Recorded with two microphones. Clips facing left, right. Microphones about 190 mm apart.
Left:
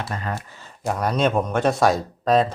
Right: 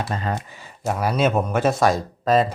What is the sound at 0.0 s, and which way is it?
Speech, 25° right (ahead or behind).